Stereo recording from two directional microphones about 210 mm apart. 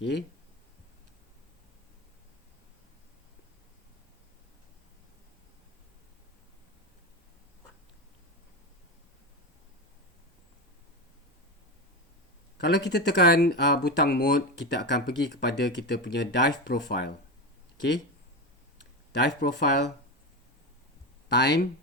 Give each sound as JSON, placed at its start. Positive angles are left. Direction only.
{"t": 12.5, "sound": "speech", "side_deg": 50}
{"t": 19.1, "sound": "speech", "side_deg": 50}
{"t": 21.2, "sound": "speech", "side_deg": 55}